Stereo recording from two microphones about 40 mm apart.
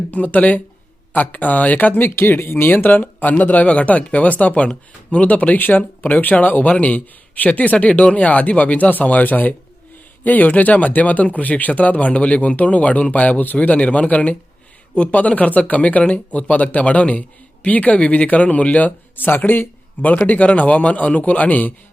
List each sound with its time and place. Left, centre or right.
0.1 s speech: left
2.0 s speech: left
5.5 s speech: left
20.1 s speech: left